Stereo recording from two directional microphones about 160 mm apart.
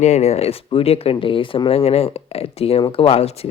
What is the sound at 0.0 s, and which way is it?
Speech, 45° left (ahead or behind).